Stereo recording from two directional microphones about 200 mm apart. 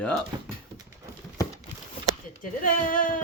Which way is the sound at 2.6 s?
40° left (ahead or behind).